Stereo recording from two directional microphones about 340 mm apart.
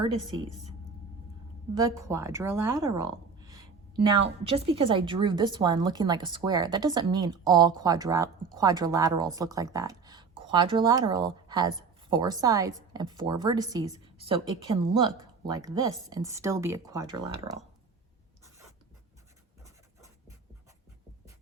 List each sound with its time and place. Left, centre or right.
1.7 s speech: centre
19.6 s writing: centre